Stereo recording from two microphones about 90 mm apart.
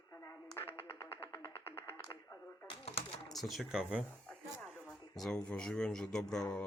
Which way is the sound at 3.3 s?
Centre (ahead or behind).